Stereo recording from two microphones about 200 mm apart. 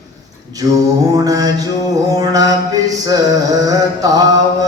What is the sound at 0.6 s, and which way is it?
Mantra, 15° right (ahead or behind).